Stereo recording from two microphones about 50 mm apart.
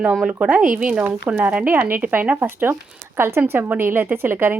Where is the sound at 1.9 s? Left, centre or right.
Right.